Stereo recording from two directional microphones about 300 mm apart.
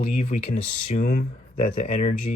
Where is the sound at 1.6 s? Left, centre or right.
Centre.